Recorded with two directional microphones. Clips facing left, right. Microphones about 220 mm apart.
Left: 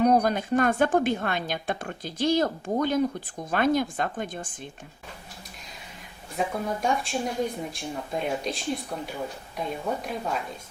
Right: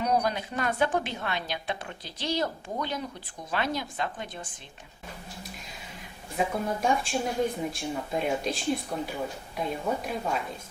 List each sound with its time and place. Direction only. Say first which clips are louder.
0.0 s a woman's voice: left 6 dB; 50° left (ahead or behind)
6.3 s speech: even; centre (ahead or behind)